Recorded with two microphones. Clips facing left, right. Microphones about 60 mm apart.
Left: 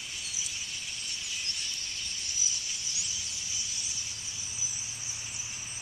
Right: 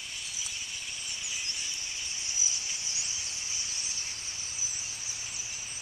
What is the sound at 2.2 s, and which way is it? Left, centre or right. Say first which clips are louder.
Squeal: right 1 dB; right.